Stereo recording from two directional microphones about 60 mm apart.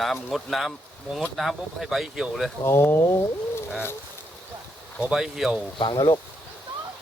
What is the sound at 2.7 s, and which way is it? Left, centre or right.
Speech, left.